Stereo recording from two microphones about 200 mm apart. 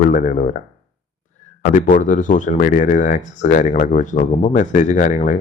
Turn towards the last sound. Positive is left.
turn(degrees=40)  # may be behind; listen again after turning